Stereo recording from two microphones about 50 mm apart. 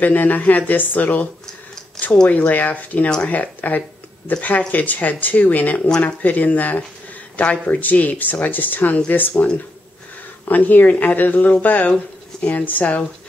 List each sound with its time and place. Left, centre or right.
0.0 s speech: left
10.5 s speech: left